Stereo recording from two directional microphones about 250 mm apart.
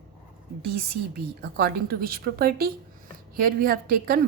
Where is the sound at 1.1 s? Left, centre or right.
Right.